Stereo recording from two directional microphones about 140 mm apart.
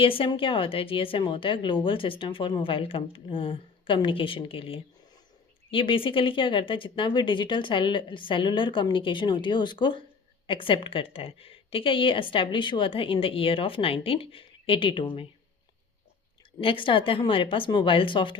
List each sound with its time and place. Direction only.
0.0 s speech: 40° left (ahead or behind)
16.6 s speech: 40° left (ahead or behind)